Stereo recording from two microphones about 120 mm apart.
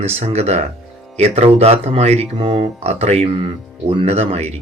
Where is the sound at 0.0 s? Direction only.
60° right (ahead or behind).